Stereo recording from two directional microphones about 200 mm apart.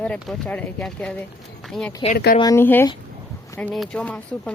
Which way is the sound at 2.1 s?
50° left (ahead or behind).